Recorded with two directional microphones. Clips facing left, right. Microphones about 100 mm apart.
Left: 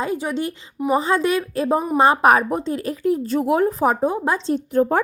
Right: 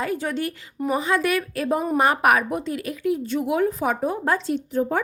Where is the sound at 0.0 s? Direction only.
20° left (ahead or behind).